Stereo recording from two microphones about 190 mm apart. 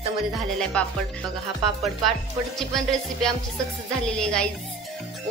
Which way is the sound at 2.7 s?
Centre (ahead or behind).